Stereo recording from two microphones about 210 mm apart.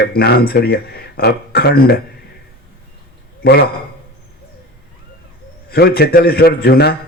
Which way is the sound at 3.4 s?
50° left (ahead or behind).